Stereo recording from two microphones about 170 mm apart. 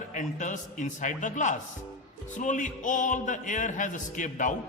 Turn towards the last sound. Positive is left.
turn(degrees=50)  # may be behind; listen again after turning